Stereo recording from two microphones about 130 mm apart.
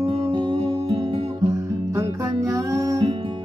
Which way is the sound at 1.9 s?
25° right (ahead or behind).